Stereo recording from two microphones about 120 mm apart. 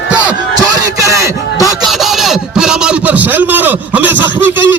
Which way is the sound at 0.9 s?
25° right (ahead or behind).